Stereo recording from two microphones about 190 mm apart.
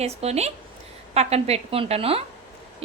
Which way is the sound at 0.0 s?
35° right (ahead or behind).